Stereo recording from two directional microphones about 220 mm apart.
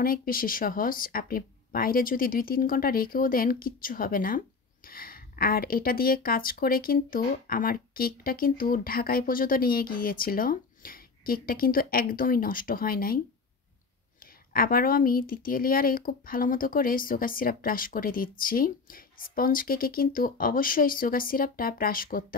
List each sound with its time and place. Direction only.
0.0 s speech: 40° left (ahead or behind)
14.2 s speech: 40° left (ahead or behind)